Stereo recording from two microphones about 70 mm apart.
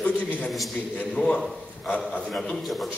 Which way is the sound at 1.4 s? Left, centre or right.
Centre.